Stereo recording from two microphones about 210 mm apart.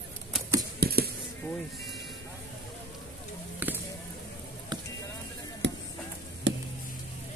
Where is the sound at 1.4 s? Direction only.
10° left (ahead or behind).